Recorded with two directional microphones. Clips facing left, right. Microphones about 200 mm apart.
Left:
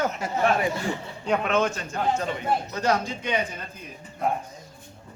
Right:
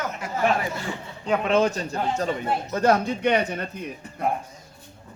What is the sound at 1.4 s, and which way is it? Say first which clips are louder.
Speech: right 3 dB; 35° right (ahead or behind).